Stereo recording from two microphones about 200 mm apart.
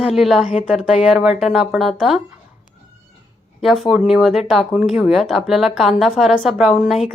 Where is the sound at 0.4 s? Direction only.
35° left (ahead or behind).